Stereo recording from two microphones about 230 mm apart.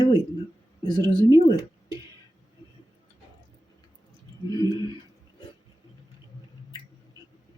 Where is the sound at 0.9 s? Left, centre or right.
Centre.